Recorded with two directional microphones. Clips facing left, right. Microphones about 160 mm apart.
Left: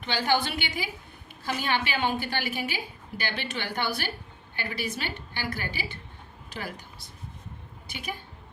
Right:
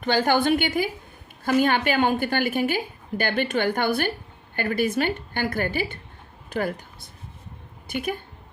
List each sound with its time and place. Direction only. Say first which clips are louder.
0.0 s a woman's voice: right 6 dB; 50° right (ahead or behind)
7.9 s a woman's voice: right 10 dB; 50° right (ahead or behind)